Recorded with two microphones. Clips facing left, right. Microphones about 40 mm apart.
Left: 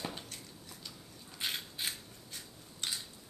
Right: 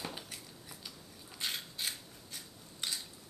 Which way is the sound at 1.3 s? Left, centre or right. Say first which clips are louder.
Left 1 dB; centre.